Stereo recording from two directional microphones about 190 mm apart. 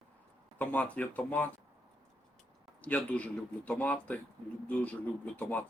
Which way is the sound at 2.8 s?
5° left (ahead or behind).